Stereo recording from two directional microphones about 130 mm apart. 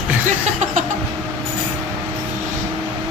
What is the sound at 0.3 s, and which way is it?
Music, 65° right (ahead or behind).